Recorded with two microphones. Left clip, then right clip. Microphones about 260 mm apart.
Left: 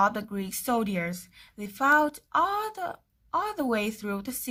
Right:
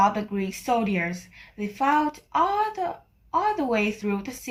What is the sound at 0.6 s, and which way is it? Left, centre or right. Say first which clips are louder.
A woman's voice: right 3 dB; left.